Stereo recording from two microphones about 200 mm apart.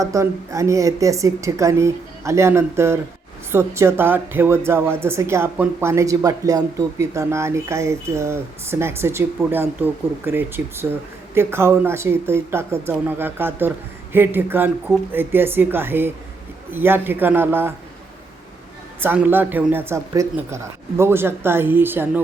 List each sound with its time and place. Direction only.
0.0 s speech: 15° right (ahead or behind)
18.9 s speech: 10° right (ahead or behind)